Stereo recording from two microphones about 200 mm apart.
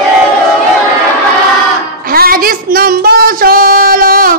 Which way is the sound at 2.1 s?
45° right (ahead or behind).